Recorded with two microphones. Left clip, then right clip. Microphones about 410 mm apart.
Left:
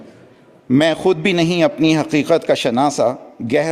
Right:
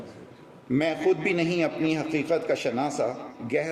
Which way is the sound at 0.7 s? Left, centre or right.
Left.